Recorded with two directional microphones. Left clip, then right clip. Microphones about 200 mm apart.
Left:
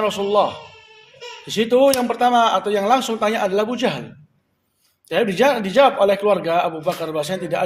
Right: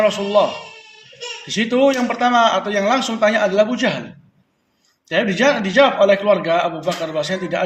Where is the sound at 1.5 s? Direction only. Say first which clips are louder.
Left 1 dB; 50° left (ahead or behind).